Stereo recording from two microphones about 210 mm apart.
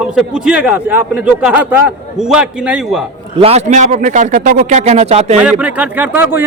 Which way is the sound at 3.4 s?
30° right (ahead or behind).